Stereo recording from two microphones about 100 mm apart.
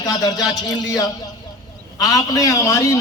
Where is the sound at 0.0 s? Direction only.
40° left (ahead or behind).